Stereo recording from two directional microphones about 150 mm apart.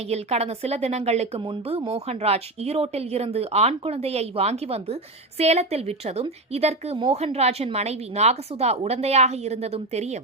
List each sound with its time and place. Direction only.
0.1 s speech: 45° right (ahead or behind)